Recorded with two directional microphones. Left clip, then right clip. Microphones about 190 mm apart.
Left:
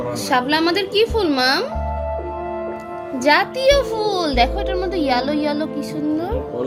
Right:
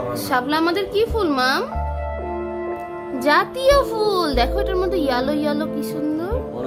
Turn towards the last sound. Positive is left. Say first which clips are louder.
# left 1 dB
turn(degrees=-20)  # may be behind; listen again after turning